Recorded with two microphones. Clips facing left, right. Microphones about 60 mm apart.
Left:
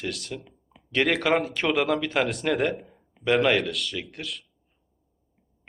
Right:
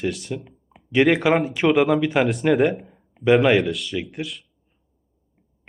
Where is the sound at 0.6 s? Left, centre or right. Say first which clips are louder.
Right 7 dB; centre.